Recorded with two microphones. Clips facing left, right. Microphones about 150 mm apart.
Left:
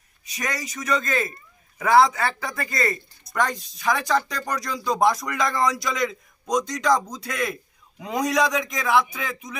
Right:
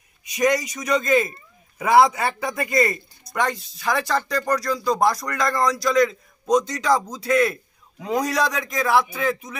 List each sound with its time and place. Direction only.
0.3 s a man's voice: 10° right (ahead or behind)
1.8 s speech: 20° right (ahead or behind)
3.4 s a man's voice: 5° right (ahead or behind)